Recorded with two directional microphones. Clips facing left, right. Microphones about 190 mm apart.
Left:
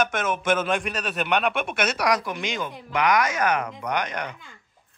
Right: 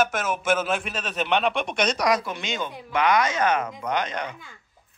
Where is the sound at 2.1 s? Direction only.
15° left (ahead or behind).